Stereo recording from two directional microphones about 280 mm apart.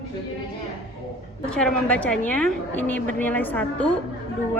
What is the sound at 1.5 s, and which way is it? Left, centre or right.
A woman's voice, centre.